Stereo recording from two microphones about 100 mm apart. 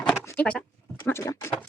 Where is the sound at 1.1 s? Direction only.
25° left (ahead or behind).